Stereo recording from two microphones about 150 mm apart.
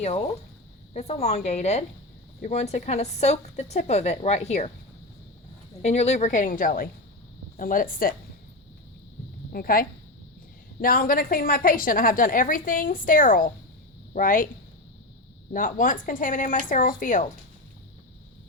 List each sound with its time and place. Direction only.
0.9 s speech: 50° left (ahead or behind)
5.8 s a woman's voice: 45° left (ahead or behind); by 8.1 s 75° left (ahead or behind)
9.5 s a woman's voice: 80° left
15.5 s speech: 65° left (ahead or behind)